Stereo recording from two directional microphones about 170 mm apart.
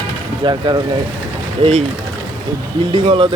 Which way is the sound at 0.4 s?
25° right (ahead or behind).